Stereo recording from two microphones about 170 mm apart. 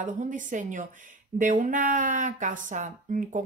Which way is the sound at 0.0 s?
50° right (ahead or behind).